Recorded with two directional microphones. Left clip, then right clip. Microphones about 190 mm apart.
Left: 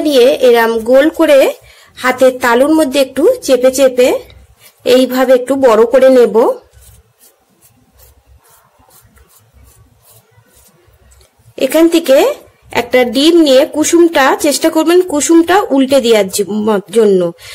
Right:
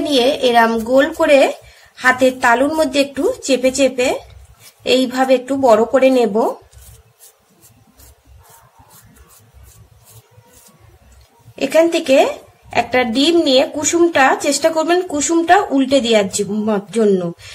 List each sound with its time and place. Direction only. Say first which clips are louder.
0.0 s a woman's voice: left 7 dB; 45° left (ahead or behind)
11.5 s a woman's voice: left 4 dB; 55° left (ahead or behind)